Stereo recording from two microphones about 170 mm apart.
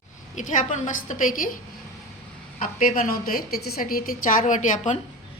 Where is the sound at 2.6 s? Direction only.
55° left (ahead or behind).